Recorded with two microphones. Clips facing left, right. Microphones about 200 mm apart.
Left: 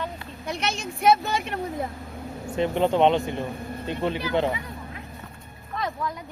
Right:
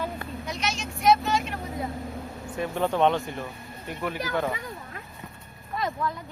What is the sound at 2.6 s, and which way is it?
Speech, 20° left (ahead or behind).